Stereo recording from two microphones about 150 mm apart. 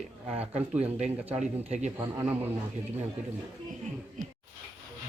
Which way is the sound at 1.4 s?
50° right (ahead or behind).